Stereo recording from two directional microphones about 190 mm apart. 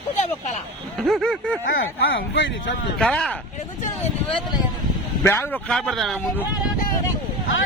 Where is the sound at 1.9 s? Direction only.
70° left (ahead or behind).